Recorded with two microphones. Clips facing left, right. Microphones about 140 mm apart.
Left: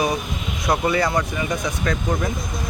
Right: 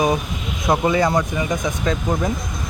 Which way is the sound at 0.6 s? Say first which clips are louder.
Right 3 dB; 15° right (ahead or behind).